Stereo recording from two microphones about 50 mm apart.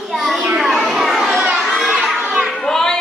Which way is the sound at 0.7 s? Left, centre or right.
Centre.